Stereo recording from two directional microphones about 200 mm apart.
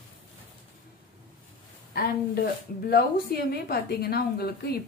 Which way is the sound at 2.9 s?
50° left (ahead or behind).